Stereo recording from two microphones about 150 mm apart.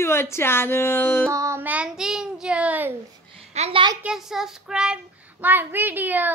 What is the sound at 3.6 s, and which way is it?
Speech, 40° right (ahead or behind).